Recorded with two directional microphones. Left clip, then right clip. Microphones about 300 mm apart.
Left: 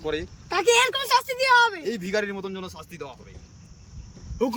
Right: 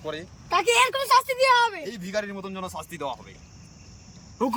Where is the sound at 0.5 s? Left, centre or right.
Centre.